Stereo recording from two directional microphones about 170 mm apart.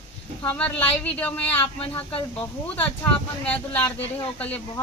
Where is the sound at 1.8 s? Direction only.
35° left (ahead or behind).